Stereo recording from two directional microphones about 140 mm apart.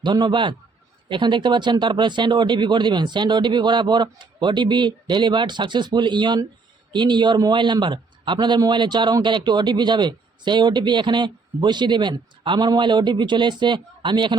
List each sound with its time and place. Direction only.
0.0 s a man's voice: 30° right (ahead or behind)